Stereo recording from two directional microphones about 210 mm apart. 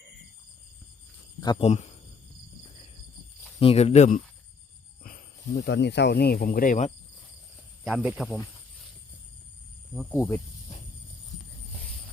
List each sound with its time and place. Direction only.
1.5 s speech: 30° left (ahead or behind)
3.6 s speech: 30° left (ahead or behind)
5.0 s speech: 50° left (ahead or behind)
7.9 s speech: 5° right (ahead or behind)
10.1 s speech: 10° left (ahead or behind)